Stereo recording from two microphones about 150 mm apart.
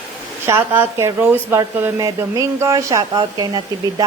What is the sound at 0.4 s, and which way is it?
Speech, 15° right (ahead or behind).